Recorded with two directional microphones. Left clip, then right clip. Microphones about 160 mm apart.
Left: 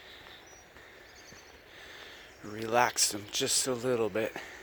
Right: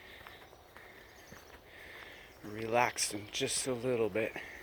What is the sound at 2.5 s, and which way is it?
Speech, 40° left (ahead or behind).